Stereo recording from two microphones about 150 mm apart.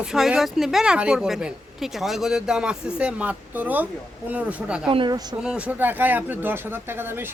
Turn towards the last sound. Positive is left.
turn(degrees=-15)  # may be behind; listen again after turning